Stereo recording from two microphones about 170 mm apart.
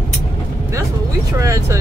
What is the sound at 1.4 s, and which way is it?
Speech, 20° right (ahead or behind).